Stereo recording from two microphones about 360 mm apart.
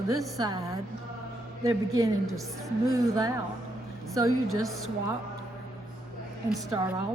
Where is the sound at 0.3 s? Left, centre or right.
Centre.